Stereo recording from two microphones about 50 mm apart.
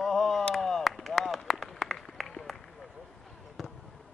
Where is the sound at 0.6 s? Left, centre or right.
Centre.